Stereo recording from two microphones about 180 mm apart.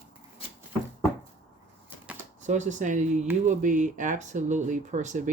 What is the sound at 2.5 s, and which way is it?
Speech, 40° right (ahead or behind).